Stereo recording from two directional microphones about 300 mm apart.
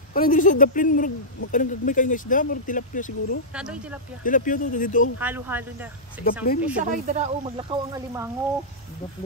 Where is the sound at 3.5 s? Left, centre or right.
Centre.